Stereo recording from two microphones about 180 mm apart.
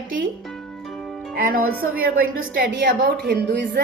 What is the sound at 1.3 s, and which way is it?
Speech, 50° right (ahead or behind).